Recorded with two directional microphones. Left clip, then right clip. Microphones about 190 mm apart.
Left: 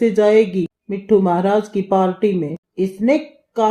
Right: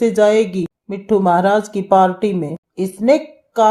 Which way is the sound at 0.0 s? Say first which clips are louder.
Even; 25° right (ahead or behind).